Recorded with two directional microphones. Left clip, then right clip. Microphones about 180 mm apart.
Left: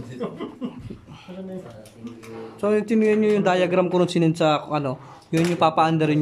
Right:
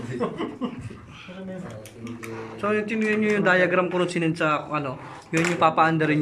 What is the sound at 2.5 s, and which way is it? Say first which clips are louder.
A man's voice: left 4 dB; 25° left (ahead or behind).